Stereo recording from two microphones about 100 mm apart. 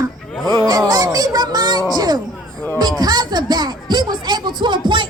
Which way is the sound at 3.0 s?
45° right (ahead or behind).